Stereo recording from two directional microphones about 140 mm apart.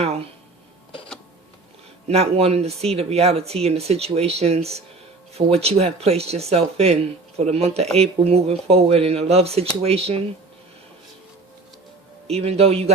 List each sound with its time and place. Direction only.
2.0 s speech: 45° right (ahead or behind)
12.3 s speech: 45° right (ahead or behind)